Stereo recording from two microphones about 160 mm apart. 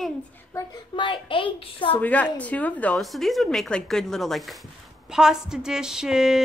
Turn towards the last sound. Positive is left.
turn(degrees=-5)  # may be behind; listen again after turning